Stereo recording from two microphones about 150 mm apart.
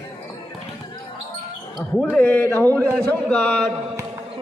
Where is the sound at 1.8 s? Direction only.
Centre (ahead or behind).